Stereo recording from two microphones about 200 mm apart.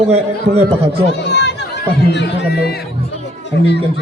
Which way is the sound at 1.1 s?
55° left (ahead or behind).